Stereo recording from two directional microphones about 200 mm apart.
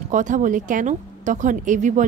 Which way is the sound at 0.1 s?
40° right (ahead or behind).